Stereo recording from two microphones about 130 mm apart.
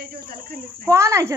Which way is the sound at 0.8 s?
20° right (ahead or behind).